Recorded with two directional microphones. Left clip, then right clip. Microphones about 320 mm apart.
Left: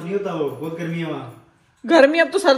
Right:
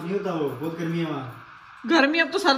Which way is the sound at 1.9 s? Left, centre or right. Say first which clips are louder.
Left 6 dB; centre.